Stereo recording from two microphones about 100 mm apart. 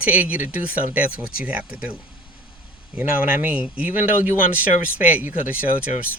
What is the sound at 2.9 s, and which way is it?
Speech, 15° right (ahead or behind).